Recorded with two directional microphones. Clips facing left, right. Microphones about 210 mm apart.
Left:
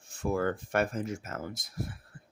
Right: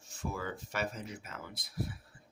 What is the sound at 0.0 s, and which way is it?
Speech, 55° left (ahead or behind).